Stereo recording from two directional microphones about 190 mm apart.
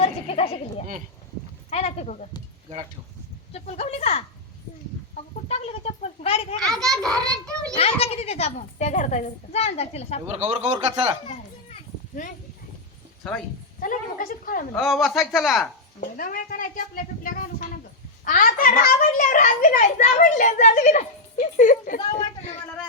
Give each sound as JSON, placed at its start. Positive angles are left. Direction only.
{"t": 0.0, "sound": "a sound", "side_deg": 30}
{"t": 1.7, "sound": "a child's voice", "side_deg": 35}
{"t": 3.5, "sound": "a child's voice", "side_deg": 35}
{"t": 5.1, "sound": "a sound", "side_deg": 35}
{"t": 6.7, "sound": "speech", "side_deg": 5}
{"t": 7.8, "sound": "a child's voice", "side_deg": 30}
{"t": 10.2, "sound": "speech", "side_deg": -35}
{"t": 11.3, "sound": "children playing", "side_deg": 40}
{"t": 13.7, "sound": "a child's voice", "side_deg": 45}
{"t": 14.7, "sound": "speech", "side_deg": 5}
{"t": 16.0, "sound": "a child's voice", "side_deg": 45}